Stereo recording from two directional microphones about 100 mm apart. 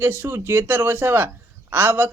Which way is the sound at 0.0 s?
20° right (ahead or behind).